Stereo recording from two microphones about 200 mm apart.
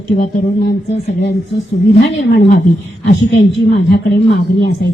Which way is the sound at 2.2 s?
60° left (ahead or behind).